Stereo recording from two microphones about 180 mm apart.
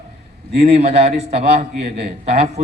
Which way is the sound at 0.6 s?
35° right (ahead or behind).